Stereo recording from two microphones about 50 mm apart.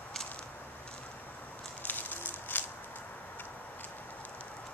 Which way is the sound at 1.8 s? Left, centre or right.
Left.